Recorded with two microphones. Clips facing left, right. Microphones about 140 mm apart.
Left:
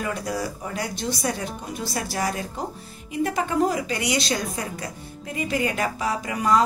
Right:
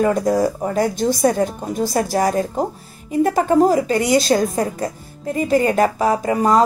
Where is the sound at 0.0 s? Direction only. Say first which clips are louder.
Right 11 dB; 45° right (ahead or behind).